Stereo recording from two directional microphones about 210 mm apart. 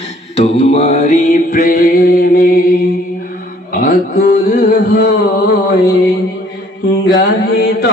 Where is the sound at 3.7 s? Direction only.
45° left (ahead or behind).